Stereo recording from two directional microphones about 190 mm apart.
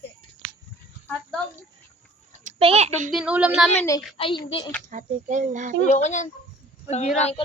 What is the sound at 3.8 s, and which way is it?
Speech, 15° left (ahead or behind).